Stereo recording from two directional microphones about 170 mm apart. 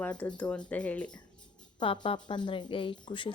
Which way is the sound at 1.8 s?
30° left (ahead or behind).